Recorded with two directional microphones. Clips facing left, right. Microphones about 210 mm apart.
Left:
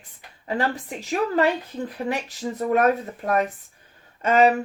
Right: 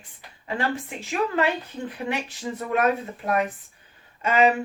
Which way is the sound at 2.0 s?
40° left (ahead or behind).